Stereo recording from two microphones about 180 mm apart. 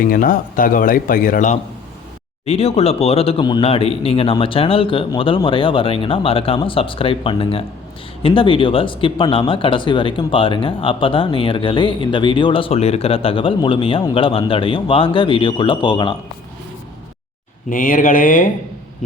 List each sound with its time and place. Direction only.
0.0 s speech: 50° left (ahead or behind)
2.5 s speech: 35° left (ahead or behind)
17.7 s speech: 50° left (ahead or behind)